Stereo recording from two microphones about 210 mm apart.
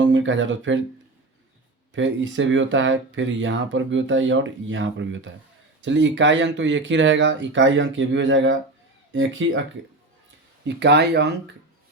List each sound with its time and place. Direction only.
0.0 s speech: 65° right (ahead or behind)
1.9 s speech: 60° right (ahead or behind)
10.7 s speech: 55° right (ahead or behind)